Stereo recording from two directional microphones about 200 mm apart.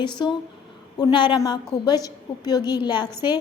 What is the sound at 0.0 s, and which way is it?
A woman's voice, 20° left (ahead or behind).